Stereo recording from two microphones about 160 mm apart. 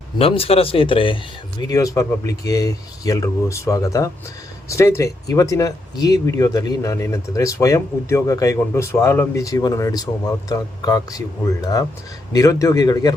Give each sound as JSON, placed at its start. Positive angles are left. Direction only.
{"t": 0.2, "sound": "speech", "side_deg": 35}
{"t": 1.6, "sound": "speech", "side_deg": 20}